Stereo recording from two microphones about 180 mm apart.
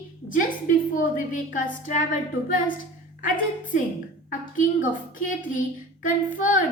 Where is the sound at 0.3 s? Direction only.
50° left (ahead or behind).